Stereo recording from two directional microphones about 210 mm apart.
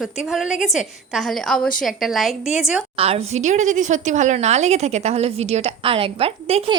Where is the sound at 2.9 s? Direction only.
30° right (ahead or behind).